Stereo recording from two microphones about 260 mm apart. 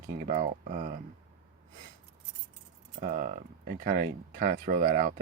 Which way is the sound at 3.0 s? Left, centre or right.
Right.